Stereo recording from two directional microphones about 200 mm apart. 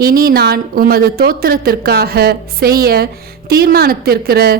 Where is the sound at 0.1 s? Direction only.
45° right (ahead or behind).